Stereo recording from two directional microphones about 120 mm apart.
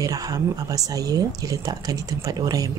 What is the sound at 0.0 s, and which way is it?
Speech, 30° right (ahead or behind).